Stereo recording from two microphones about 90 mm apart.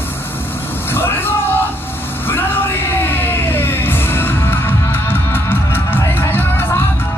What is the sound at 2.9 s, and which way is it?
Music, 25° left (ahead or behind).